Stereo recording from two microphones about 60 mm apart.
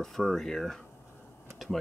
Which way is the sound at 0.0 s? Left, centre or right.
Centre.